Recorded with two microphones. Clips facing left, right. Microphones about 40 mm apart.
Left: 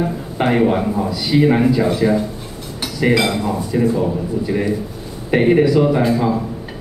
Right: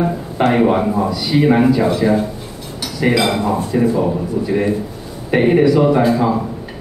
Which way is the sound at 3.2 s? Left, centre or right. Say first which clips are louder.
Right 2 dB; centre.